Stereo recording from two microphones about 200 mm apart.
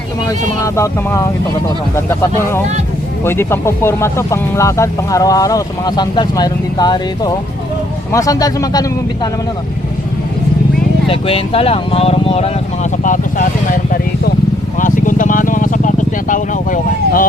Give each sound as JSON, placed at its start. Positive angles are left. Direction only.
{"t": 0.3, "sound": "speech", "side_deg": 15}
{"t": 11.1, "sound": "speech", "side_deg": 30}
{"t": 13.7, "sound": "speech", "side_deg": 45}
{"t": 14.8, "sound": "vehicle", "side_deg": 40}
{"t": 16.3, "sound": "speech", "side_deg": 40}